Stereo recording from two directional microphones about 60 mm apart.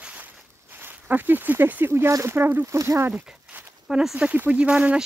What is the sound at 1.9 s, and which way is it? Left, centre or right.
Speech, right.